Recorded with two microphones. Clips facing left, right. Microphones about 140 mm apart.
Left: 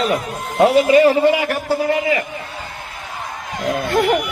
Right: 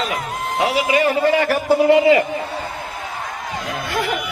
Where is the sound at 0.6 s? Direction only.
50° left (ahead or behind).